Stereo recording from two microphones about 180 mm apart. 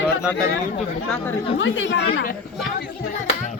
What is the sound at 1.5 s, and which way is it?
Speech, 90° left.